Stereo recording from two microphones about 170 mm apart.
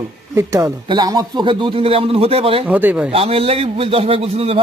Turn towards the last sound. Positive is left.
turn(degrees=-35)  # may be behind; listen again after turning